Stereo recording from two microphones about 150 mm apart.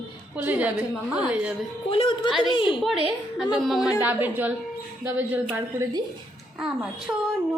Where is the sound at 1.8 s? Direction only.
35° left (ahead or behind).